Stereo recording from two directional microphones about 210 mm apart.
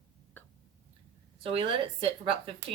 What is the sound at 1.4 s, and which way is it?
Speech, 25° right (ahead or behind).